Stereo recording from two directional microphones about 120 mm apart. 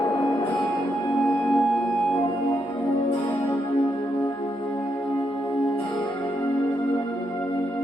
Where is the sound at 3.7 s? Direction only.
45° left (ahead or behind).